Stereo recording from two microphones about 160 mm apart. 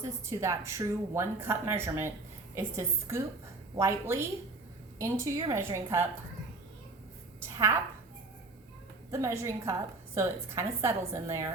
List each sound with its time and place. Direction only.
0.0 s a woman's voice: 20° right (ahead or behind)
7.3 s a sound: 15° right (ahead or behind)
9.1 s speech: 20° right (ahead or behind)